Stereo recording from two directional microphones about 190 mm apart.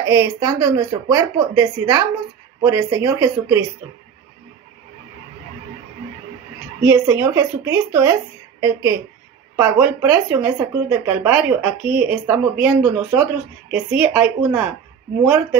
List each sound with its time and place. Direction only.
0.0 s speech: 15° right (ahead or behind)
6.8 s speech: 15° right (ahead or behind)